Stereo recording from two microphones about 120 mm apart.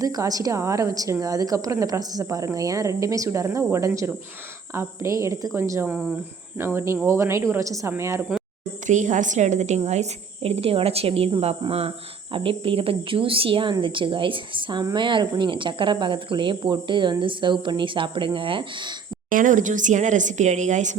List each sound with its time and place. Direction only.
0.0 s a woman's voice: 30° right (ahead or behind)
8.9 s a woman's voice: 90° right; by 18.9 s 45° right (ahead or behind)
19.3 s a woman's voice: 90° right